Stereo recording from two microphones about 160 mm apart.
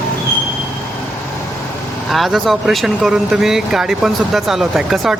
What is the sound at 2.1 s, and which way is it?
Speech, centre (ahead or behind).